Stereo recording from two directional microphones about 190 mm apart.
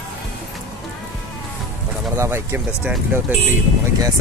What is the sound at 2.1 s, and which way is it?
Speech, 10° right (ahead or behind).